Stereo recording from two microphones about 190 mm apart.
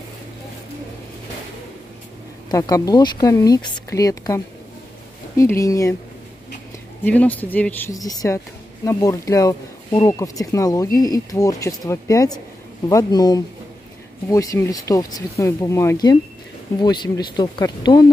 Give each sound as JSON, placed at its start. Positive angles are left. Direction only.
{"t": 2.5, "sound": "speech", "side_deg": 20}
{"t": 5.4, "sound": "speech", "side_deg": 15}
{"t": 7.1, "sound": "speech", "side_deg": 10}